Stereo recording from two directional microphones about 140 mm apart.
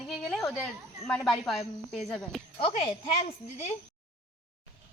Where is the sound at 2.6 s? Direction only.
45° left (ahead or behind).